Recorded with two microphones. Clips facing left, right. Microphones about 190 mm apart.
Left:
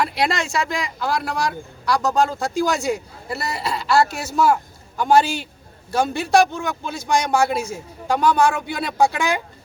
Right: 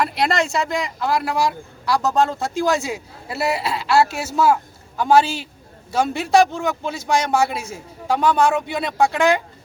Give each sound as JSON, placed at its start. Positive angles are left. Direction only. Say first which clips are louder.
{"t": 0.0, "sound": "speech", "louder": "right 2 dB", "side_deg": 0}